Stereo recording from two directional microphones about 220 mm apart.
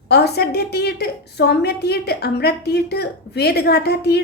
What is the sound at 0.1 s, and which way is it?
A woman's voice, 45° left (ahead or behind).